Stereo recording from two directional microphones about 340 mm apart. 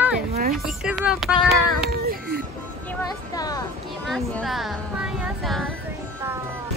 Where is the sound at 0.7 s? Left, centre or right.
Centre.